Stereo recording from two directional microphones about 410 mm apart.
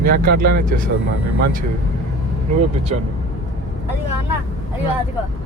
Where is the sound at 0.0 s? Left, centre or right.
Right.